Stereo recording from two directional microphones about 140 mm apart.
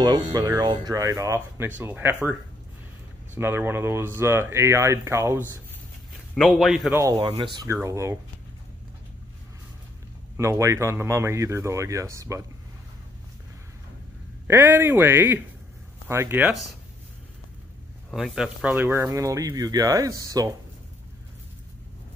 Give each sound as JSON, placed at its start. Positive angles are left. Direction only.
{"t": 0.0, "sound": "speech", "side_deg": -30}
{"t": 3.3, "sound": "speech", "side_deg": -15}
{"t": 6.3, "sound": "a man's voice", "side_deg": 0}
{"t": 7.2, "sound": "speech", "side_deg": -40}
{"t": 7.6, "sound": "speech", "side_deg": -20}
{"t": 10.3, "sound": "speech", "side_deg": -20}
{"t": 14.5, "sound": "speech", "side_deg": -15}
{"t": 18.1, "sound": "speech", "side_deg": -5}